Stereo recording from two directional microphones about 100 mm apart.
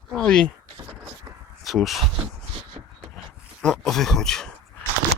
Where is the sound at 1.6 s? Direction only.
Centre (ahead or behind).